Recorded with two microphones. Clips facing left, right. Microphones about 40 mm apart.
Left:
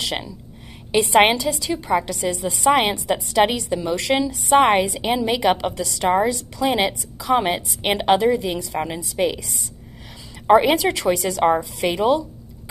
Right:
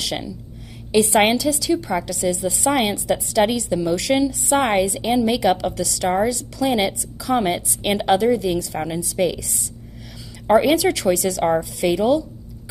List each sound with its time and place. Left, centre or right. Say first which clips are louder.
0.0 s a woman's voice: even; centre